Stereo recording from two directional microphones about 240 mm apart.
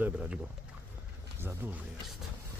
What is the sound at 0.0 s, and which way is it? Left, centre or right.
Speech, centre.